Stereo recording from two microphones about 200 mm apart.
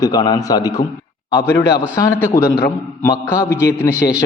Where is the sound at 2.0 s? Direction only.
15° left (ahead or behind).